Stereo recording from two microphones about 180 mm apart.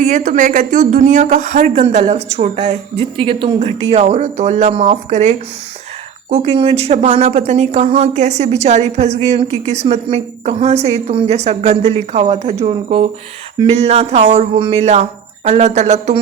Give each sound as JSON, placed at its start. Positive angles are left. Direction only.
{"t": 0.0, "sound": "a woman's voice", "side_deg": -45}